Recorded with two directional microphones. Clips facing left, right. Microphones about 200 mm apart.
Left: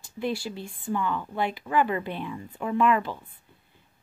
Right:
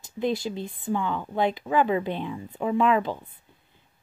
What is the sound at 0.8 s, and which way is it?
Speech, 15° right (ahead or behind).